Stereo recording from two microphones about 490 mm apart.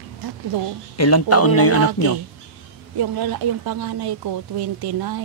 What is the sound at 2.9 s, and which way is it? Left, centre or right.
Speech, right.